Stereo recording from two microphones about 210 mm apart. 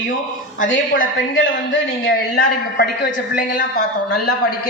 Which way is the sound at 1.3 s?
60° left (ahead or behind).